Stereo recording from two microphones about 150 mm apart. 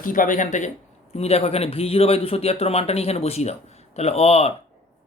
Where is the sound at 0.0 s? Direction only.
65° left (ahead or behind).